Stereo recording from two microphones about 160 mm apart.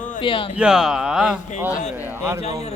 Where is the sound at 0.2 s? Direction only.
30° left (ahead or behind).